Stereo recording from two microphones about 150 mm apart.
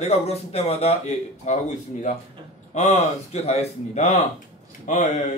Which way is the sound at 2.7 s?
50° left (ahead or behind).